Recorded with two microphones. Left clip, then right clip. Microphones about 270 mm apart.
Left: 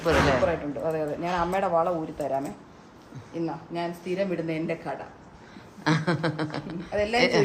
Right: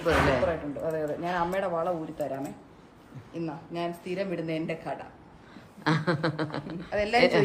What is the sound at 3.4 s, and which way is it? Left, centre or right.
A man's voice, centre.